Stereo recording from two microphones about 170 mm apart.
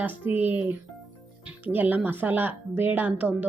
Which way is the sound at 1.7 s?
10° right (ahead or behind).